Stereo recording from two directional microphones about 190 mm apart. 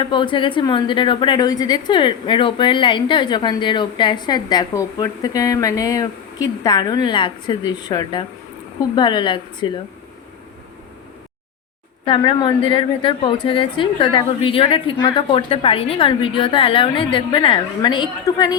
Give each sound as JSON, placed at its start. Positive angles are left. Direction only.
{"t": 0.0, "sound": "a woman's voice", "side_deg": 25}
{"t": 12.0, "sound": "a woman's voice", "side_deg": 25}